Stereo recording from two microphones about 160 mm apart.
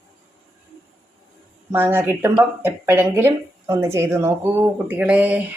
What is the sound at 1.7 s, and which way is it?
Speech, 15° right (ahead or behind).